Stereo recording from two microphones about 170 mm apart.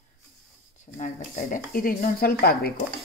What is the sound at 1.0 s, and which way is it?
Speech, 55° left (ahead or behind).